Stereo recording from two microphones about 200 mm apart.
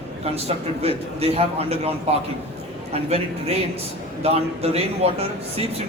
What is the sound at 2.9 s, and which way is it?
A man's voice, 30° right (ahead or behind).